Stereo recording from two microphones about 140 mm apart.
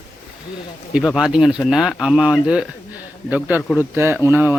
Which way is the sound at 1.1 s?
5° right (ahead or behind).